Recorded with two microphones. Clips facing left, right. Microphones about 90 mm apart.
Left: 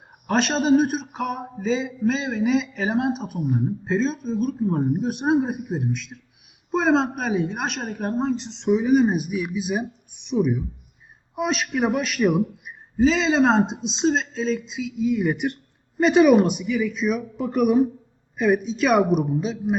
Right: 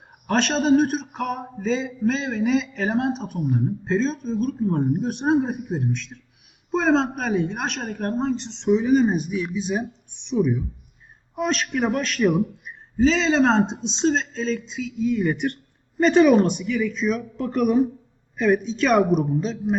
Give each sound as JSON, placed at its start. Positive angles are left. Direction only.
{"t": 0.3, "sound": "speech", "side_deg": 5}